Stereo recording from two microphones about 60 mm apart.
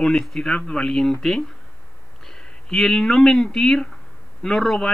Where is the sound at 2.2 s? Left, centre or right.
Centre.